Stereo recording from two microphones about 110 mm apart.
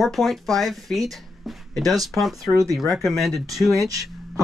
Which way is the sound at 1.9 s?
35° right (ahead or behind).